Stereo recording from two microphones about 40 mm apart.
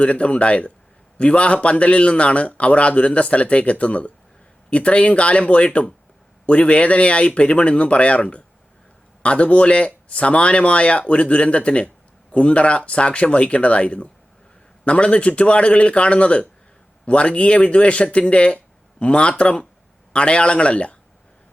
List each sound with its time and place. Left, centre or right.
0.0 s a man's voice: left